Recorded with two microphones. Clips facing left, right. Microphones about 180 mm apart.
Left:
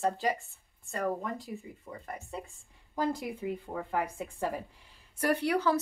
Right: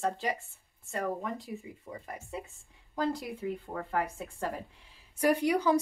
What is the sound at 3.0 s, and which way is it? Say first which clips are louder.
Speech: even; 5° left (ahead or behind).